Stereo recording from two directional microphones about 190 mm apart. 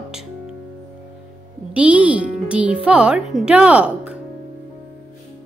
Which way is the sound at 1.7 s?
5° right (ahead or behind).